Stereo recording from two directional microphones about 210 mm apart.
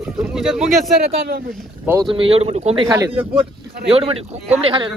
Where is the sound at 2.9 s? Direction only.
15° right (ahead or behind).